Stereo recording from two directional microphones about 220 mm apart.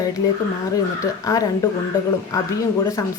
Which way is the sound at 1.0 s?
15° left (ahead or behind).